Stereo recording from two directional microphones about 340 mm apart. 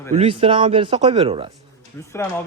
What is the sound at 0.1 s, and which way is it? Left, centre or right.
Speech, centre.